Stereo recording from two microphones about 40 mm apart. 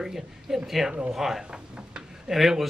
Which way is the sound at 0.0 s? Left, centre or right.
Centre.